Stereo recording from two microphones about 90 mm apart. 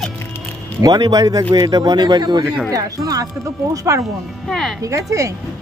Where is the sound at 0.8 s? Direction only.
50° right (ahead or behind).